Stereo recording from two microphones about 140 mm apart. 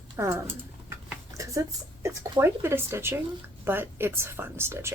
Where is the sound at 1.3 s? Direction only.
25° right (ahead or behind).